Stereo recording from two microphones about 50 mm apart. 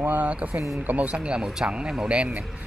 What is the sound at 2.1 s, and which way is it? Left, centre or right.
Speech, right.